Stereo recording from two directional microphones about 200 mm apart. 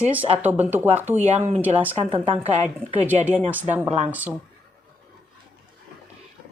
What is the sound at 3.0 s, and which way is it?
Speech, 10° right (ahead or behind).